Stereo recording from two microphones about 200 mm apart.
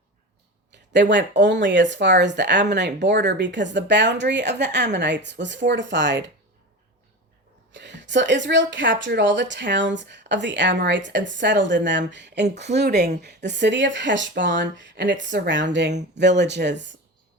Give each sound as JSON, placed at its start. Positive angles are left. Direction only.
{"t": 0.7, "sound": "speech", "side_deg": -60}
{"t": 7.7, "sound": "speech", "side_deg": -60}